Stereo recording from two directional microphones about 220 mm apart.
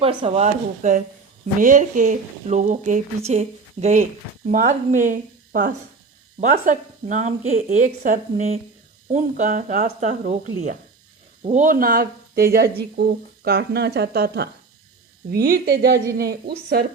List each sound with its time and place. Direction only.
0.0 s speech: 25° right (ahead or behind)
11.4 s speech: 35° right (ahead or behind)